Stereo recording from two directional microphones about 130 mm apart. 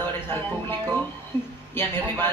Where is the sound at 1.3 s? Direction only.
20° left (ahead or behind).